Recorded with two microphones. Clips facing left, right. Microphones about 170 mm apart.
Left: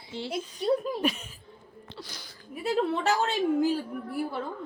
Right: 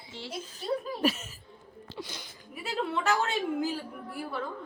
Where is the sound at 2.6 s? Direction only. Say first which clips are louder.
Left 5 dB; 35° left (ahead or behind).